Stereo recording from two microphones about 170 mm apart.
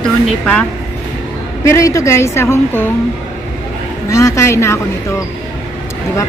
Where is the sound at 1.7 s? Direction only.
20° left (ahead or behind).